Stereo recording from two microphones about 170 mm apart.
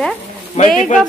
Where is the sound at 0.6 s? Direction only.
40° left (ahead or behind).